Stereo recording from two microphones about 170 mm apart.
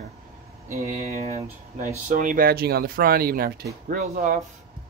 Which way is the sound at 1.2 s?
40° right (ahead or behind).